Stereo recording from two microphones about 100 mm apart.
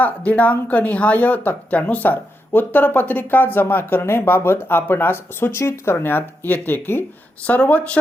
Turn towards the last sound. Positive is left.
turn(degrees=15)  # may be behind; listen again after turning